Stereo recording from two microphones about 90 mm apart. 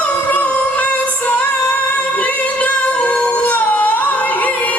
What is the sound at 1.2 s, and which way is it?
Music, 15° left (ahead or behind).